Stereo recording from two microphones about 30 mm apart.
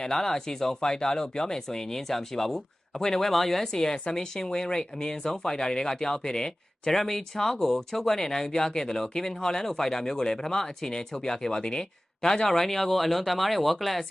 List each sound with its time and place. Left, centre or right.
0.0 s speech: centre